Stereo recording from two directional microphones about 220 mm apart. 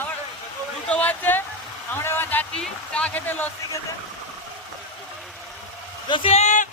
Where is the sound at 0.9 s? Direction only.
5° left (ahead or behind).